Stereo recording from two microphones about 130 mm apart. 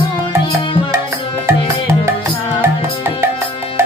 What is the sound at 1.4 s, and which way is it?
Music, 20° right (ahead or behind).